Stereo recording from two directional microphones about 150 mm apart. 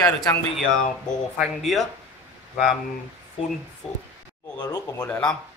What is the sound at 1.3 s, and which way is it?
Speech, centre (ahead or behind).